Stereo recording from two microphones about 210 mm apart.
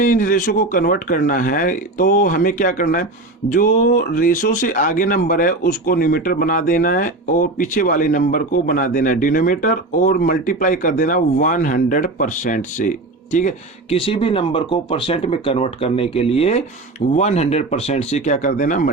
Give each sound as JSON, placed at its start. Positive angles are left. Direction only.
{"t": 0.0, "sound": "speech", "side_deg": 40}
{"t": 13.9, "sound": "speech", "side_deg": 25}